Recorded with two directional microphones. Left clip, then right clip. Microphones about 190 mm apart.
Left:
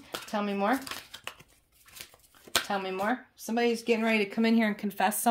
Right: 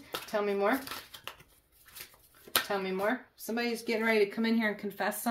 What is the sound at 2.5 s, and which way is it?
Speech, 35° left (ahead or behind).